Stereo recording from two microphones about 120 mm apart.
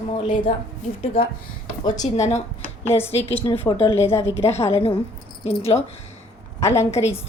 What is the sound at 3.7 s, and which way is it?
Speech, 45° left (ahead or behind).